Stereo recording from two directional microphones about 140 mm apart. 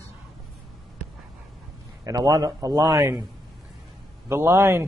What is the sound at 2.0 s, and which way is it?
Speech, 25° right (ahead or behind).